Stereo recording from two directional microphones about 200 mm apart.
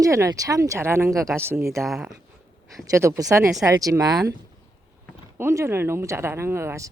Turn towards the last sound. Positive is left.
turn(degrees=-15)  # may be behind; listen again after turning